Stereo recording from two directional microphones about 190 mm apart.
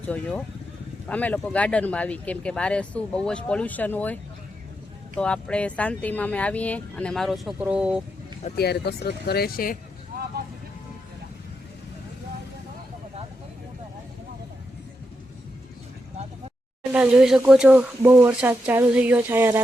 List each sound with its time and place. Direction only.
0.1 s speech: 5° left (ahead or behind)
8.5 s speech: 60° left (ahead or behind)
16.9 s speech: 5° right (ahead or behind)